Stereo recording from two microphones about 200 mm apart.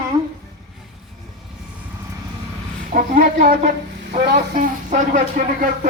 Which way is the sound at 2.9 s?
45° right (ahead or behind).